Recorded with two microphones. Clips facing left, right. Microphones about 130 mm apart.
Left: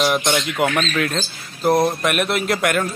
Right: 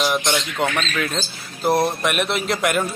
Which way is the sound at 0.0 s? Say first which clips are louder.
Left 2 dB; 5° left (ahead or behind).